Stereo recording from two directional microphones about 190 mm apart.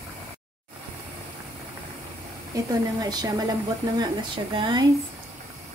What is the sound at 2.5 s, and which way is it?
A woman's voice, 20° right (ahead or behind).